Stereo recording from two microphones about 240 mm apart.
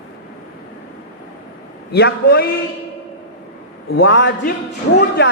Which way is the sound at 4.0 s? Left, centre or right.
Left.